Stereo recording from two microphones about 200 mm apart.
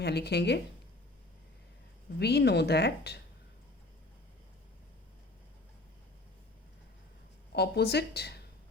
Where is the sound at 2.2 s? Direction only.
55° left (ahead or behind).